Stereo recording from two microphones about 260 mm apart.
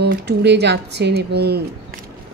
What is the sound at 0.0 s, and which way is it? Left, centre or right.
Speech, right.